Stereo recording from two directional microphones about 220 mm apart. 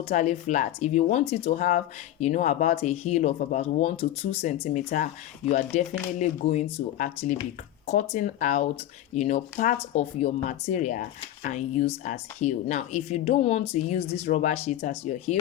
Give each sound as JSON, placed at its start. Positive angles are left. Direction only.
{"t": 0.1, "sound": "speech", "side_deg": 30}